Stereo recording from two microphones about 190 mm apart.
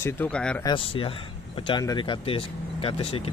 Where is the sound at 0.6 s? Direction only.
25° left (ahead or behind).